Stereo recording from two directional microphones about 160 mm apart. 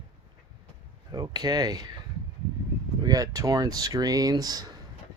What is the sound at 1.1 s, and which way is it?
Speech, 25° right (ahead or behind).